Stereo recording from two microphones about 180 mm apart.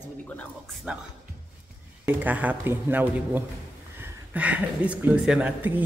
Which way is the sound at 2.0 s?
10° right (ahead or behind).